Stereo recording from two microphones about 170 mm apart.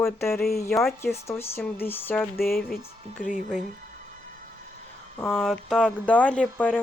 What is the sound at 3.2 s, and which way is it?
Speech, 50° left (ahead or behind).